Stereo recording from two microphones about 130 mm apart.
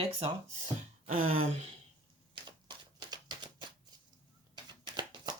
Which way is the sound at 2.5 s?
30° right (ahead or behind).